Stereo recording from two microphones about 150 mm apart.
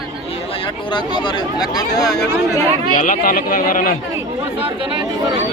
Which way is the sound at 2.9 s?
65° left (ahead or behind).